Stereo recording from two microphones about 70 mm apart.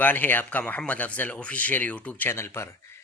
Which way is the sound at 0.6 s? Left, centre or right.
Centre.